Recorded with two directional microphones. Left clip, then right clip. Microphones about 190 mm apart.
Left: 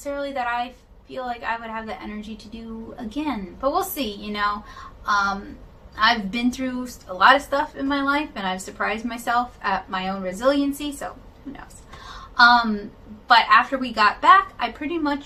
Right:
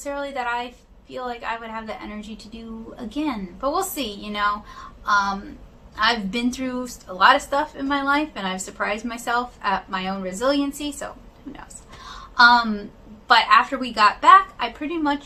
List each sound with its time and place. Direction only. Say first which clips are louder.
0.0 s a woman's voice: left 1 dB; 15° right (ahead or behind)
12.4 s a woman's voice: even; 15° right (ahead or behind)